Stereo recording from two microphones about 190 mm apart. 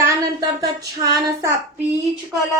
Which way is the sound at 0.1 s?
15° right (ahead or behind).